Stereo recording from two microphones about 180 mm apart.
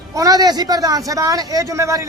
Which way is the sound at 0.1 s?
20° right (ahead or behind).